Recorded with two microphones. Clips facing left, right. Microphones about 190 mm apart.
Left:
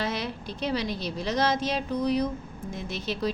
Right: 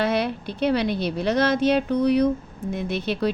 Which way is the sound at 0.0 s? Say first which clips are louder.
Right 8 dB; 60° right (ahead or behind).